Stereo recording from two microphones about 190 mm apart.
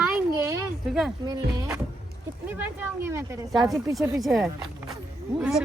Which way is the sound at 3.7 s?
Centre (ahead or behind).